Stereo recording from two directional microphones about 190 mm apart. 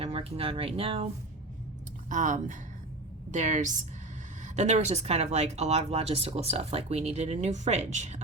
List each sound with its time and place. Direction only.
0.0 s speech: 30° right (ahead or behind)
2.0 s speech: 40° right (ahead or behind)